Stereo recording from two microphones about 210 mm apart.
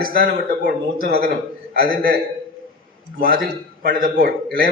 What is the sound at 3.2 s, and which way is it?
A man's voice, 45° right (ahead or behind).